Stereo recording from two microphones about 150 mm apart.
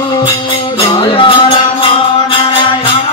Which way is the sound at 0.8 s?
35° left (ahead or behind).